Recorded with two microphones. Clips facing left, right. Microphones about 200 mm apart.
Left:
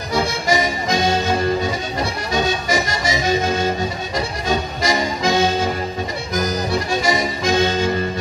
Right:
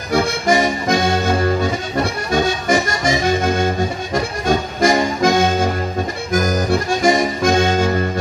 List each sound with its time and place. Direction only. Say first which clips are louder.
0.1 s music: right 4 dB; 55° right (ahead or behind)
2.3 s accordion: right 3 dB; 50° right (ahead or behind)